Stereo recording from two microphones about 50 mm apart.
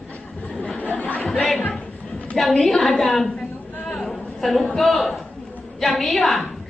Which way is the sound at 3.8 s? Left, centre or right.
Centre.